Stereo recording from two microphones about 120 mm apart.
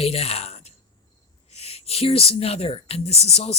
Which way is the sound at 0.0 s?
55° left (ahead or behind).